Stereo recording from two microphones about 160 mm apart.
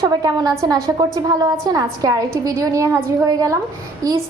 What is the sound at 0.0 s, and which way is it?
A woman's voice, 25° right (ahead or behind).